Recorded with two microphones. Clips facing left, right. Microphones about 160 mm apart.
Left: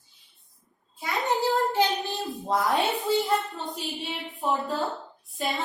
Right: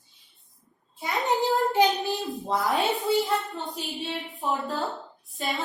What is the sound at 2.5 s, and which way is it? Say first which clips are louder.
A woman's voice: left 1 dB; centre (ahead or behind).